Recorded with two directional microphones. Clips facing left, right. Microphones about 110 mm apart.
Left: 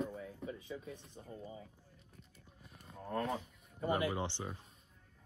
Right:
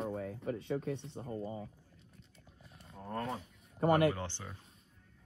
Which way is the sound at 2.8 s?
Centre (ahead or behind).